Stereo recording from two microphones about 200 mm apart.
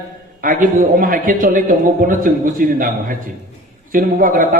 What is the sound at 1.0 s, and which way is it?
A man's voice, 45° right (ahead or behind).